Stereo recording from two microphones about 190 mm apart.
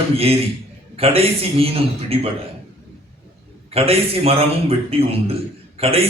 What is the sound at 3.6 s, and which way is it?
A man's voice, 30° right (ahead or behind).